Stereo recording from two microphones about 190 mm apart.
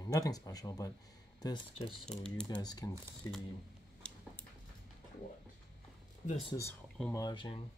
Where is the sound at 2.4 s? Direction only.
20° left (ahead or behind).